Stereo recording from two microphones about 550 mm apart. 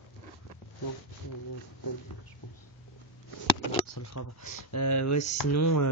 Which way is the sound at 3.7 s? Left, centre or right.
Left.